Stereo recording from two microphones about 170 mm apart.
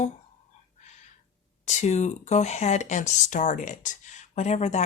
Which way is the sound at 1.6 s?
40° left (ahead or behind).